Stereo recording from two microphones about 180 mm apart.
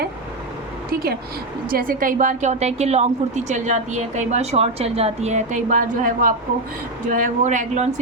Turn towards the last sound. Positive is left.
turn(degrees=-40)  # may be behind; listen again after turning